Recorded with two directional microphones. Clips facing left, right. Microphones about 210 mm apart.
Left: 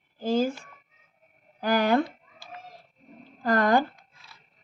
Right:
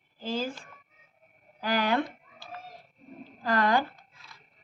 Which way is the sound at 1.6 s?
45° left (ahead or behind).